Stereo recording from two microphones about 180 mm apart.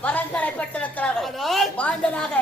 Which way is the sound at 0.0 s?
10° left (ahead or behind).